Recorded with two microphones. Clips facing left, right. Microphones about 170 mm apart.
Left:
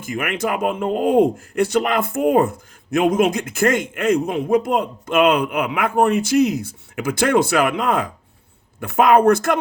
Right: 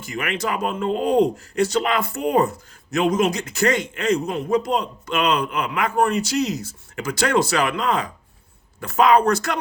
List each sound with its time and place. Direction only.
0.0 s speech: 50° left (ahead or behind)